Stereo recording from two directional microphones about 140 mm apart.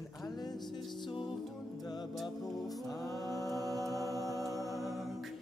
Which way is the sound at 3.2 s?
25° right (ahead or behind).